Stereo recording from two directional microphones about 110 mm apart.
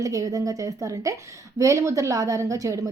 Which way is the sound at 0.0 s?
30° right (ahead or behind).